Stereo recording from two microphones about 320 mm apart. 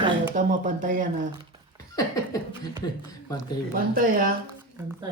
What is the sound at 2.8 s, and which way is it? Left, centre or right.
Speech, centre.